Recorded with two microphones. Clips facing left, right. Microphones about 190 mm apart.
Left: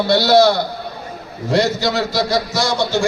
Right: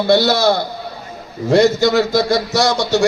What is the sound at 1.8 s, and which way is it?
Speech, 50° right (ahead or behind).